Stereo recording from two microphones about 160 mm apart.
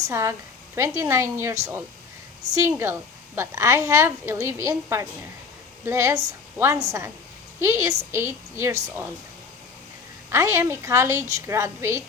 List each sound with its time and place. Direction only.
0.0 s a woman's voice: 15° right (ahead or behind)
2.6 s a woman's voice: 15° right (ahead or behind)
10.3 s a woman's voice: 15° right (ahead or behind)